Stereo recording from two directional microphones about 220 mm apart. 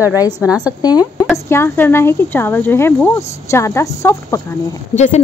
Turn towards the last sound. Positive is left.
turn(degrees=30)  # may be behind; listen again after turning